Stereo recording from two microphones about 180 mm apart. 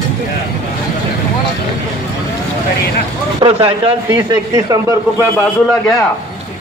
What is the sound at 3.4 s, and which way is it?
Speech, 30° right (ahead or behind).